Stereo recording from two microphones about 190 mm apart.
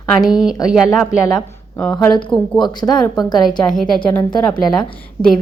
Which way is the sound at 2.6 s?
20° left (ahead or behind).